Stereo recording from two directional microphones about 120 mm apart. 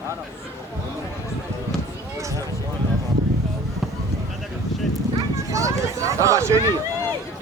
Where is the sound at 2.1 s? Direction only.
25° right (ahead or behind).